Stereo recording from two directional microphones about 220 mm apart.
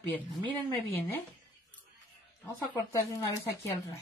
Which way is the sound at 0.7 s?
10° left (ahead or behind).